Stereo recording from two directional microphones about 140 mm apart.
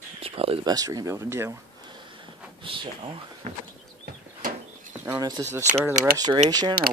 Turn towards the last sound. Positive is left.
turn(degrees=-30)  # may be behind; listen again after turning